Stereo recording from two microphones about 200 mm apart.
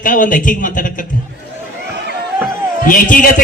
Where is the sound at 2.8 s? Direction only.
45° left (ahead or behind).